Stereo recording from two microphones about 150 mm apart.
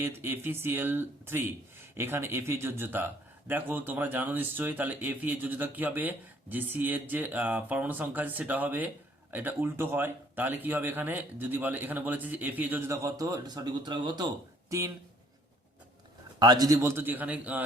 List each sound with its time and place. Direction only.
0.0 s speech: 15° right (ahead or behind)
16.4 s speech: 25° right (ahead or behind); by 17.6 s 10° right (ahead or behind)